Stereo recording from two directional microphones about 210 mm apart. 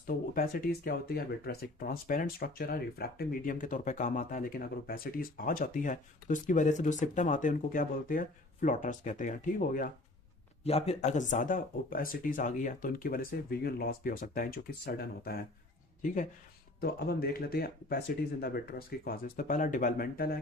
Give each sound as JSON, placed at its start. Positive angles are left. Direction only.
{"t": 0.0, "sound": "speech", "side_deg": 45}
{"t": 10.6, "sound": "speech", "side_deg": 30}
{"t": 16.8, "sound": "speech", "side_deg": 45}